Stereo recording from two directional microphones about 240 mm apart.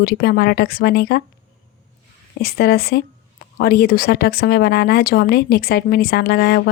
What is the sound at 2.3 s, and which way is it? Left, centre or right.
Speech, left.